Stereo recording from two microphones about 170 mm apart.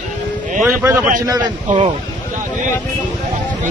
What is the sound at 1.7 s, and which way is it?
Speech, 45° right (ahead or behind).